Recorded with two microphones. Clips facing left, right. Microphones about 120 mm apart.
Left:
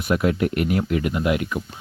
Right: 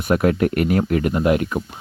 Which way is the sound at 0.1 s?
50° right (ahead or behind).